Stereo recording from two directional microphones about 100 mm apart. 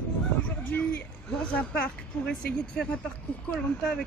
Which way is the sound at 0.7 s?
15° left (ahead or behind).